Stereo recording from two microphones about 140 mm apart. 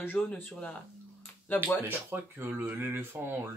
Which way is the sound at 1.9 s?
15° right (ahead or behind).